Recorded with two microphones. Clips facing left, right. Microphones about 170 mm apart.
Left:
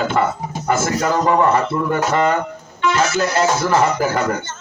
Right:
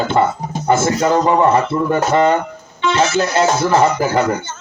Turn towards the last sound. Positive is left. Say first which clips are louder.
# right 3 dB
turn(degrees=-25)  # may be behind; listen again after turning